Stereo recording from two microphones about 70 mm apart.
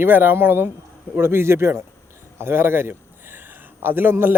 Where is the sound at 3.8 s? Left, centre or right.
Right.